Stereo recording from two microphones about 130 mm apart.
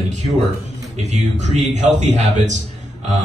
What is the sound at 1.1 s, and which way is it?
A man's voice, 60° right (ahead or behind).